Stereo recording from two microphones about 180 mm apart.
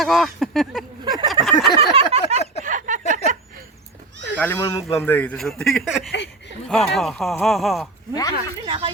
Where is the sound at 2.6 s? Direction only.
45° right (ahead or behind).